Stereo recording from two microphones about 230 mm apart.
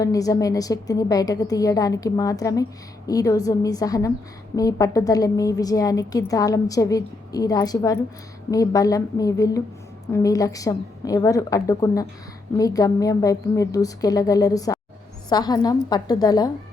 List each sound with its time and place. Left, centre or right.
0.0 s a woman's voice: centre